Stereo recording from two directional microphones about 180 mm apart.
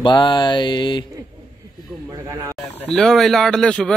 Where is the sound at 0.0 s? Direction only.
25° left (ahead or behind).